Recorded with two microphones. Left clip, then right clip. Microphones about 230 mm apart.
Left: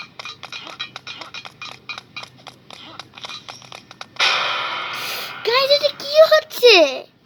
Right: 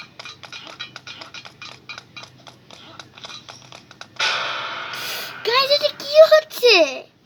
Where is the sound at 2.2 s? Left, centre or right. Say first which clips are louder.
Left 4 dB; left.